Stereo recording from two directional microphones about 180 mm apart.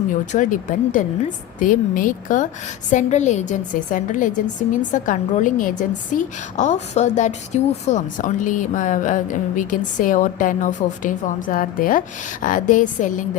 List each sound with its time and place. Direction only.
0.3 s a woman's voice: 45° left (ahead or behind)